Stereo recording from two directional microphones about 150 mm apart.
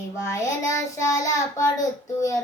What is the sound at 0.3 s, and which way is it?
Child singing, 20° left (ahead or behind).